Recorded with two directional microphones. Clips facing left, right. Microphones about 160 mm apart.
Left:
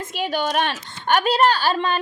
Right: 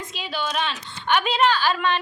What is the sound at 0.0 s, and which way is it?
A woman's voice, 50° left (ahead or behind).